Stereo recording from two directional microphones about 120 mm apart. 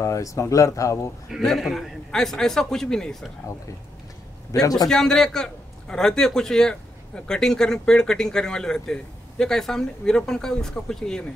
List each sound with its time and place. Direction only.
0.0 s speech: 25° left (ahead or behind)
1.3 s a man's voice: centre (ahead or behind)
4.5 s speech: 30° left (ahead or behind)
4.8 s a man's voice: 5° left (ahead or behind)